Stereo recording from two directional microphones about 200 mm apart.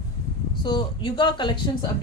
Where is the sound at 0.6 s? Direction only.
20° left (ahead or behind).